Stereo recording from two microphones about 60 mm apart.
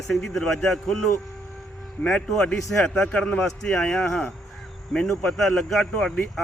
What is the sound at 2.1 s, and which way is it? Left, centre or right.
A man's voice, centre.